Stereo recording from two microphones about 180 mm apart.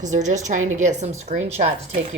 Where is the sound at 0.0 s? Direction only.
40° right (ahead or behind).